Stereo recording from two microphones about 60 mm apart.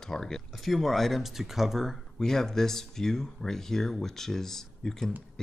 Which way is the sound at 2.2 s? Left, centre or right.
Centre.